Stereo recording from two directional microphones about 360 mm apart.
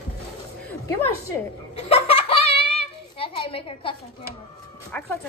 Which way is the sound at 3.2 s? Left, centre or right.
Centre.